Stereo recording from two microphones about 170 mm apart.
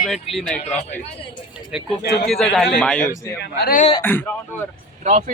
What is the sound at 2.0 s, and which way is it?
Speech, 75° left (ahead or behind).